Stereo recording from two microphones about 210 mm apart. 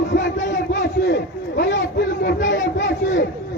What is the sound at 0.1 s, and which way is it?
A man's voice, 55° left (ahead or behind).